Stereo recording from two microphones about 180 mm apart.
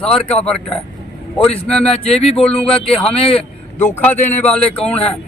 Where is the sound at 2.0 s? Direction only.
35° left (ahead or behind).